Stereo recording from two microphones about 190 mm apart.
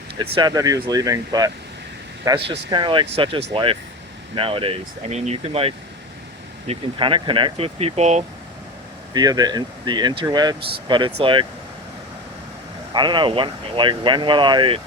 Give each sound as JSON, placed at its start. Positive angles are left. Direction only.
{"t": 0.3, "sound": "speech", "side_deg": -20}
{"t": 9.1, "sound": "speech", "side_deg": -20}
{"t": 12.9, "sound": "speech", "side_deg": -25}